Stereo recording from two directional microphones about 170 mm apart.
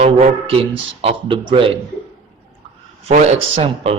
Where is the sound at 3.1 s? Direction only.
40° right (ahead or behind).